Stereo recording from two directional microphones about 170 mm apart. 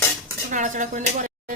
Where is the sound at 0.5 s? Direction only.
50° right (ahead or behind).